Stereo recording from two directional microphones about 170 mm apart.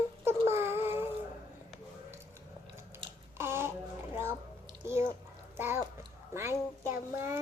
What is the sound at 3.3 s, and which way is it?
Babbling, 15° right (ahead or behind).